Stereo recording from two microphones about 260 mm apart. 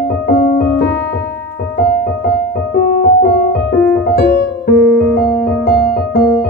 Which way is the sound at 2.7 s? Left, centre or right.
Left.